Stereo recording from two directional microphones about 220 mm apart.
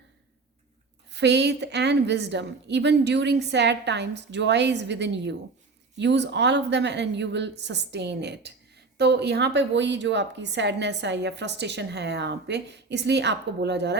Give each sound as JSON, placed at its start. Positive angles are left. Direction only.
{"t": 1.1, "sound": "a woman's voice", "side_deg": -50}